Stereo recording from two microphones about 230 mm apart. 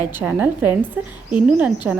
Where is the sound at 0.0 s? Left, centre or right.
Centre.